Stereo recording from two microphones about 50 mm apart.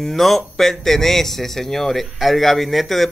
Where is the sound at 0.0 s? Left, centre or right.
Centre.